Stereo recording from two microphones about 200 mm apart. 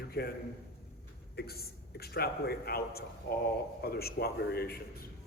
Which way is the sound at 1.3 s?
50° left (ahead or behind).